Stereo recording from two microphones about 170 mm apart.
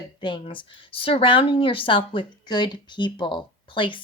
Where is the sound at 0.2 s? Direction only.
30° left (ahead or behind).